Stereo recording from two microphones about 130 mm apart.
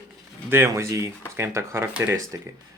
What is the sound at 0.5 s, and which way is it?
Speech, 20° right (ahead or behind).